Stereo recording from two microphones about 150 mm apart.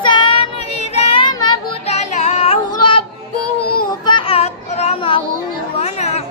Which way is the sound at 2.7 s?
35° left (ahead or behind).